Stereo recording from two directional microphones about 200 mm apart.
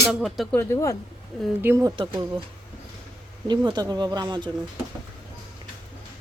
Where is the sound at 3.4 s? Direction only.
20° right (ahead or behind).